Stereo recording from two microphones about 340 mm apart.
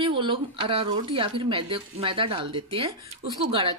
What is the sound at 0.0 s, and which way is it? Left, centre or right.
Speech, centre.